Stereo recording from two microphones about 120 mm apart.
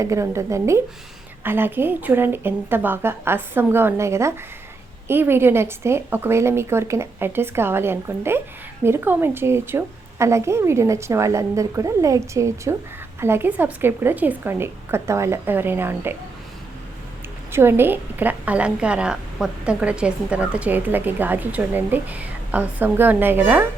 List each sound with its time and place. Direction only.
0.0 s a woman's voice: 25° right (ahead or behind)
17.5 s a woman's voice: 20° right (ahead or behind)